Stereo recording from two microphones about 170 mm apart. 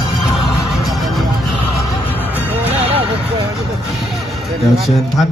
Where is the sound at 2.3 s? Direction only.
10° left (ahead or behind).